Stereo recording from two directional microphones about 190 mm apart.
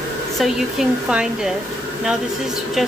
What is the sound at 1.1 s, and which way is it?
Speech, 5° right (ahead or behind).